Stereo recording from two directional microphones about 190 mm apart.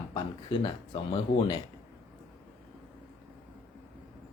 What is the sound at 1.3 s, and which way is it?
Speech, 45° left (ahead or behind).